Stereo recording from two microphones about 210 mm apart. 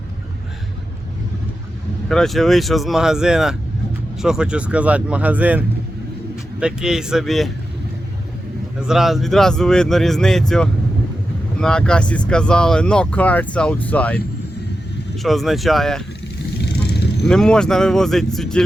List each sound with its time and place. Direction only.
2.0 s speech: centre (ahead or behind)
8.9 s speech: centre (ahead or behind)
11.6 s speech: 5° left (ahead or behind)
15.2 s speech: centre (ahead or behind)
16.6 s vehicle: 50° left (ahead or behind)
17.2 s speech: 5° left (ahead or behind)